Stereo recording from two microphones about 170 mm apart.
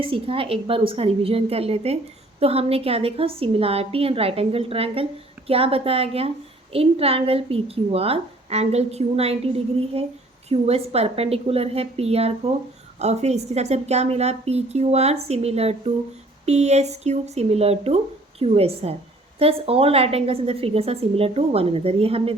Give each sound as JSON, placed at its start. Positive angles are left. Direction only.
{"t": 0.0, "sound": "a woman's voice", "side_deg": -30}